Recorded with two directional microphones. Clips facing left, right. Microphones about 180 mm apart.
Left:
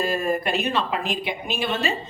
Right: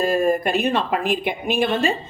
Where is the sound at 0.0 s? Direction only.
50° right (ahead or behind).